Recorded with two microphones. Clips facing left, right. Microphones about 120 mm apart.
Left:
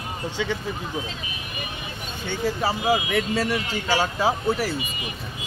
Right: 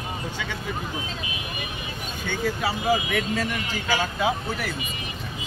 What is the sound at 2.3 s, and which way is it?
Speech, 30° left (ahead or behind).